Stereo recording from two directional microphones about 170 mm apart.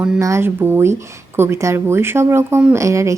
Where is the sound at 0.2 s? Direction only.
15° right (ahead or behind).